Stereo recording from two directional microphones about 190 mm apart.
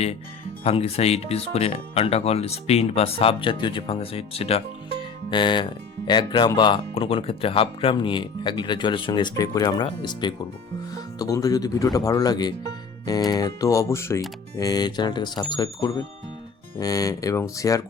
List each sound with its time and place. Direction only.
0.6 s speech: 30° left (ahead or behind); by 17.8 s 15° left (ahead or behind)